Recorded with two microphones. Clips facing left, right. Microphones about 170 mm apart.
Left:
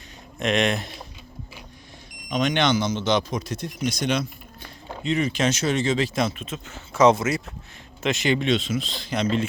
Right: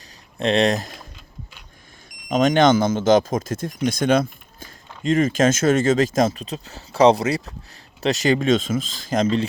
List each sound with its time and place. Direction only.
0.3 s speech: 35° right (ahead or behind)
2.3 s speech: 45° right (ahead or behind)